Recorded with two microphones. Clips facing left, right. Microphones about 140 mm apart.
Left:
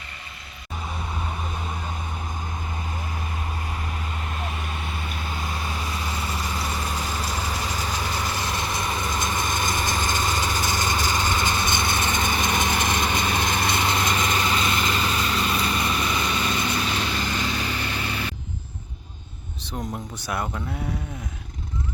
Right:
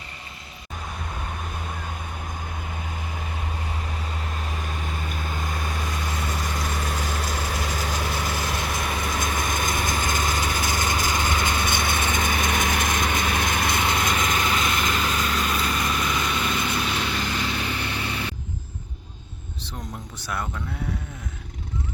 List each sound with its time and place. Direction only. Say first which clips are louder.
5.3 s vehicle: left 1 dB; 50° right (ahead or behind)
7.4 s vehicle: even; centre (ahead or behind)
12.2 s lawn mower: even; 20° left (ahead or behind)
12.5 s a sound: even; centre (ahead or behind)
12.9 s vehicle: even; centre (ahead or behind)
20.2 s speech: left 2 dB; 15° left (ahead or behind)